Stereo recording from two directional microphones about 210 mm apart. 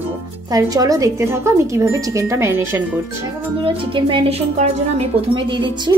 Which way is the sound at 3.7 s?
25° right (ahead or behind).